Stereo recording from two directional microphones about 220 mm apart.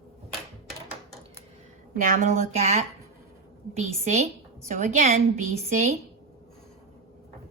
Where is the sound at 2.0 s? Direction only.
40° right (ahead or behind).